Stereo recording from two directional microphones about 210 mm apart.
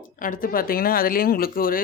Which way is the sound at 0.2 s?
40° left (ahead or behind).